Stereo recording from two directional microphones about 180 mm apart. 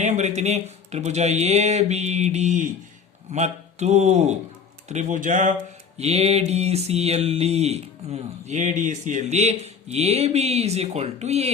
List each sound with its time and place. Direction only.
0.0 s mantra: 40° right (ahead or behind)
4.9 s speech: 40° right (ahead or behind)
6.0 s mantra: 35° right (ahead or behind)